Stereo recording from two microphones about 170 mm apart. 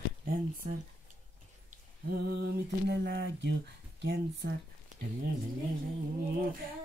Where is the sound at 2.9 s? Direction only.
70° right (ahead or behind).